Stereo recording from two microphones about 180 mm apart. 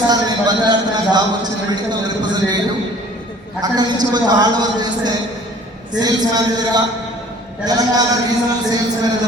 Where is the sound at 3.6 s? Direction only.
20° right (ahead or behind).